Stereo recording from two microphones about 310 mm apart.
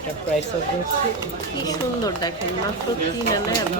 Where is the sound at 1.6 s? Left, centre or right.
Centre.